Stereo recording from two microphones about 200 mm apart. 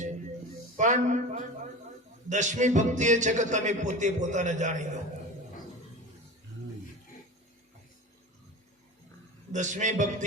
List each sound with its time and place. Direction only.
0.8 s music: 35° right (ahead or behind)
9.5 s music: 40° right (ahead or behind)